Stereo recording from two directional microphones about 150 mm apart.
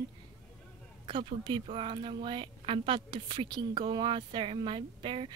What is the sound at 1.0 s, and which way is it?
A woman's voice, 35° right (ahead or behind).